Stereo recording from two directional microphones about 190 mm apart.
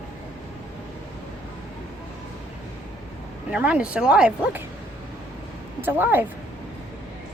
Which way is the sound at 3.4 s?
5° right (ahead or behind).